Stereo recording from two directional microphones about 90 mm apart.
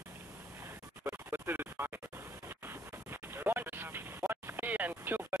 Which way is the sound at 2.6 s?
25° right (ahead or behind).